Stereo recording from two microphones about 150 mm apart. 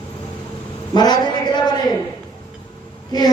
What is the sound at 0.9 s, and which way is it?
Speech, 30° left (ahead or behind).